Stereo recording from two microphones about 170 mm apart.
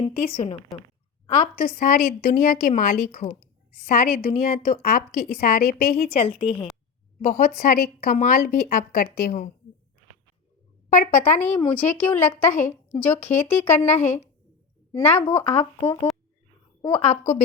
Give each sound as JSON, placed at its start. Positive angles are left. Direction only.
{"t": 1.7, "sound": "a woman's voice", "side_deg": 60}
{"t": 3.1, "sound": "a woman's voice", "side_deg": 40}
{"t": 3.8, "sound": "a woman's voice", "side_deg": 60}
{"t": 6.1, "sound": "a woman's voice", "side_deg": 30}
{"t": 7.2, "sound": "a woman's voice", "side_deg": 55}
{"t": 10.8, "sound": "a sound", "side_deg": 50}
{"t": 11.2, "sound": "speech", "side_deg": 15}
{"t": 15.5, "sound": "a woman's voice", "side_deg": 35}